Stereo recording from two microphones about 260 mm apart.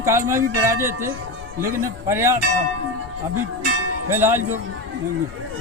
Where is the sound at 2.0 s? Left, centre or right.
Centre.